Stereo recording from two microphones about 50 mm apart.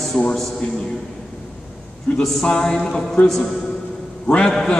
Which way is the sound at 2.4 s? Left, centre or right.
Centre.